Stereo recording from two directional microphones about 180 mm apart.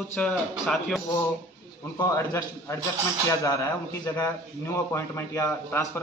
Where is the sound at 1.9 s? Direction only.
15° left (ahead or behind).